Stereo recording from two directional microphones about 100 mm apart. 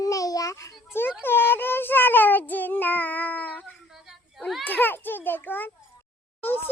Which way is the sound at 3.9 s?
Centre (ahead or behind).